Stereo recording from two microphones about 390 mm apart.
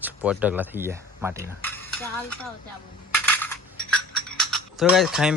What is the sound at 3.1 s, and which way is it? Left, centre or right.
Coin, centre.